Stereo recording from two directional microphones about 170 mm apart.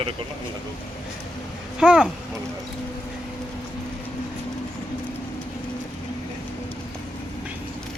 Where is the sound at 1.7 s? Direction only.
5° right (ahead or behind).